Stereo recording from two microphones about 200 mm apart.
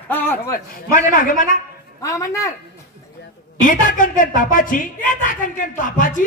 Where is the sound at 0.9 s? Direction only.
45° left (ahead or behind).